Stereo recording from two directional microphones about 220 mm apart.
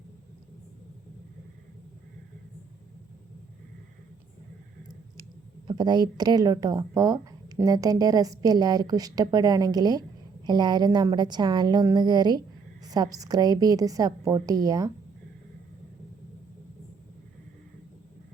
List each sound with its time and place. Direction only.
5.6 s a woman's voice: 20° right (ahead or behind)